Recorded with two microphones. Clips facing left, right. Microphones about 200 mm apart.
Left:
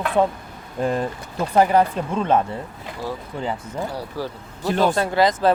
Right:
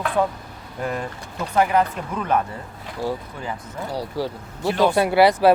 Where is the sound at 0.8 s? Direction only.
30° left (ahead or behind).